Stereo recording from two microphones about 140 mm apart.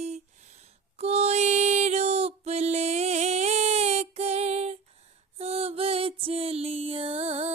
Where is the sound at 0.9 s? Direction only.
50° right (ahead or behind).